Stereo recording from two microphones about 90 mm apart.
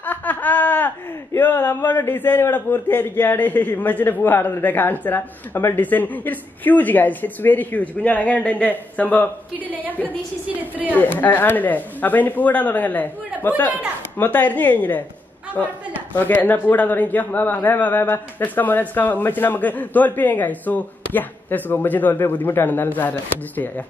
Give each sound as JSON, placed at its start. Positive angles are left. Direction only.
{"t": 0.0, "sound": "speech", "side_deg": 20}
{"t": 10.5, "sound": "a woman's voice", "side_deg": -15}
{"t": 11.0, "sound": "speech", "side_deg": 20}
{"t": 16.1, "sound": "speech", "side_deg": 20}